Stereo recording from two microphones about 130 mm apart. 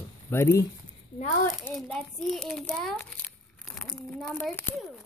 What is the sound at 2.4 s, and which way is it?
A child's voice, 5° left (ahead or behind).